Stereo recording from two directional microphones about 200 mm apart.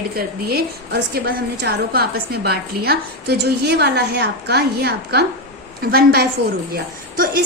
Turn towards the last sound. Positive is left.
turn(degrees=-50)  # may be behind; listen again after turning